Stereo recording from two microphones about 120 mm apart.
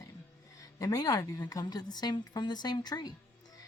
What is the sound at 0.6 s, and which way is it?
Speech, 30° left (ahead or behind).